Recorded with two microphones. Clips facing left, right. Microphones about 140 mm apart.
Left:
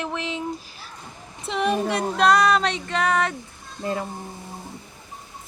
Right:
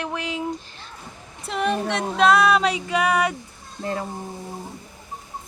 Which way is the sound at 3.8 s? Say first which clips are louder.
Even; 5° left (ahead or behind).